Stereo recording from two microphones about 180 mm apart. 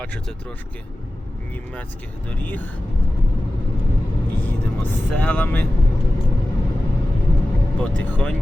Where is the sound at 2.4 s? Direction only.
10° left (ahead or behind).